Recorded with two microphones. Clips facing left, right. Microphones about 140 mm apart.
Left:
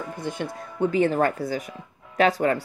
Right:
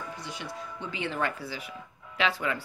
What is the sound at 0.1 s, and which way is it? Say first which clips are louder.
A woman's voice: left 8 dB; 50° left (ahead or behind).